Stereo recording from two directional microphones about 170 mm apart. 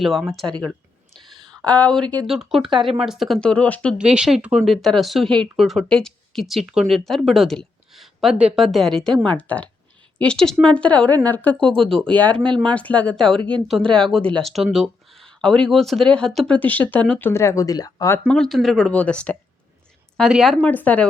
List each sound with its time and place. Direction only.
0.0 s speech: centre (ahead or behind)
2.6 s speech: 30° right (ahead or behind)
3.0 s speech: centre (ahead or behind)
3.9 s speech: 5° right (ahead or behind); by 18.2 s 20° left (ahead or behind)
18.3 s speech: 5° left (ahead or behind)